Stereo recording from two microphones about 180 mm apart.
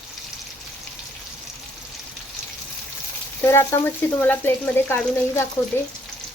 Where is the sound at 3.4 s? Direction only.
15° left (ahead or behind).